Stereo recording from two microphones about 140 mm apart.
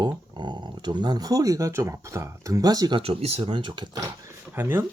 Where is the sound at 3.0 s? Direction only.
45° right (ahead or behind).